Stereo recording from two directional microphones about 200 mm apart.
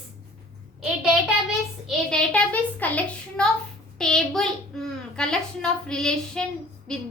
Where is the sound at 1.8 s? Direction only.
5° left (ahead or behind).